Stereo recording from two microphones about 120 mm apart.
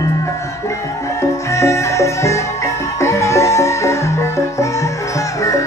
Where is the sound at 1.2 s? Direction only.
25° left (ahead or behind).